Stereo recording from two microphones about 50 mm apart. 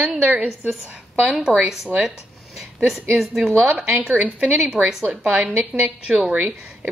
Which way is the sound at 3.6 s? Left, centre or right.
Right.